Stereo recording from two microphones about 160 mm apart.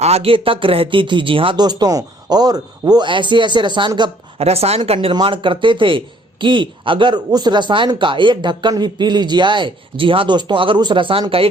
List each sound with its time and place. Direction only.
0.0 s speech: 40° right (ahead or behind)
4.4 s speech: 40° right (ahead or behind)